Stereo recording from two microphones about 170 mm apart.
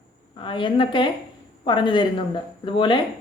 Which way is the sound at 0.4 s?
30° left (ahead or behind).